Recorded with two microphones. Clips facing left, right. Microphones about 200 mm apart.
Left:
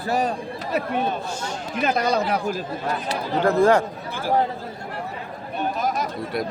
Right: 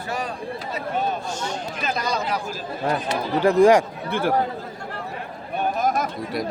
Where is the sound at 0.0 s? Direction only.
40° left (ahead or behind).